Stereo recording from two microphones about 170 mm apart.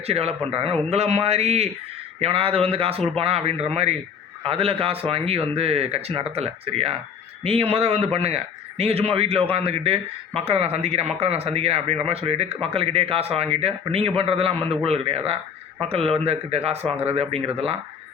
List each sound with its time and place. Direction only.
0.0 s a man's voice: 35° right (ahead or behind)